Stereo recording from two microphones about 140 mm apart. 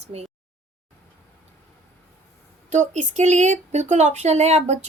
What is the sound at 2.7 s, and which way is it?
Speech, 60° right (ahead or behind).